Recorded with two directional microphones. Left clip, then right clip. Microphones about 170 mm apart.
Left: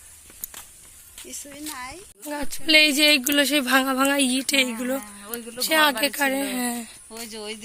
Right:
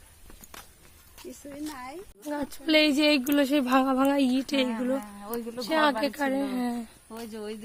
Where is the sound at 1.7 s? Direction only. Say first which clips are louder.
Left 4 dB; 25° right (ahead or behind).